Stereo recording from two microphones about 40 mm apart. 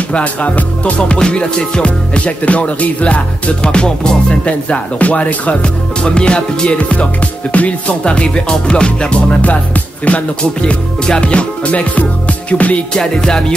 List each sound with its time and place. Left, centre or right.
0.1 s music: left
3.7 s music: left
4.5 s music: left
5.6 s music: left
8.0 s music: left
10.6 s music: left
12.9 s music: centre